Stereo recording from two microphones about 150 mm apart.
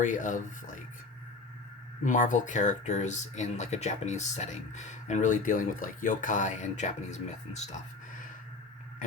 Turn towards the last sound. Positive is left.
turn(degrees=50)  # may be behind; listen again after turning